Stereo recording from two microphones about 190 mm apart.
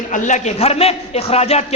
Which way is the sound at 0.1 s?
40° left (ahead or behind).